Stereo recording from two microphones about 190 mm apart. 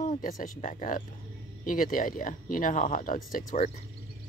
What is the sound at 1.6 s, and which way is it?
Speech, 45° left (ahead or behind).